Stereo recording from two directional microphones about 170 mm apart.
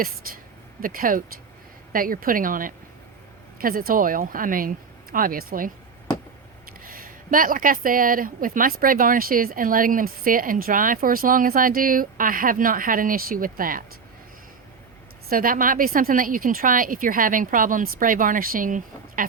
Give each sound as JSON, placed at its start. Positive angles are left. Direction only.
{"t": 0.2, "sound": "a woman's voice", "side_deg": -60}
{"t": 6.8, "sound": "speech", "side_deg": -55}
{"t": 15.3, "sound": "a woman's voice", "side_deg": -55}